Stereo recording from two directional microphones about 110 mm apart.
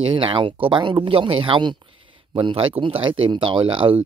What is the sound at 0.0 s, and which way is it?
Speech, 50° right (ahead or behind).